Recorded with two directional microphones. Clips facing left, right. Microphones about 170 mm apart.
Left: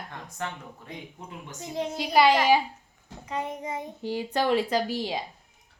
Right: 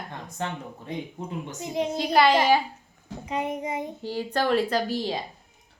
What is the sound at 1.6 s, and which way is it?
Speech, 15° right (ahead or behind).